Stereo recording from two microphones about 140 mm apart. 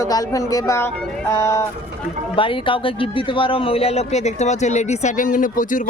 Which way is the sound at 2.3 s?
40° left (ahead or behind).